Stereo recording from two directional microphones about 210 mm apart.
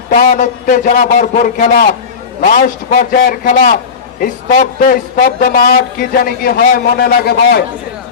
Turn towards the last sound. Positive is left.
turn(degrees=50)  # may be behind; listen again after turning